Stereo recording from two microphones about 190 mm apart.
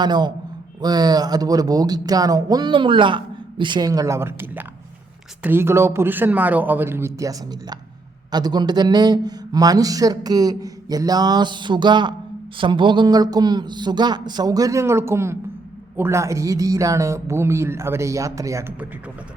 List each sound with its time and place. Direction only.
0.0 s speech: 20° right (ahead or behind)